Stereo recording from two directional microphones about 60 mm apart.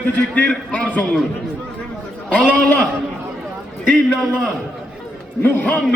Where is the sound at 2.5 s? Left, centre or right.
Left.